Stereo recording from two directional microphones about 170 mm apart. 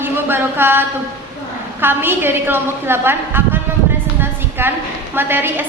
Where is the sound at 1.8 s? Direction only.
10° right (ahead or behind).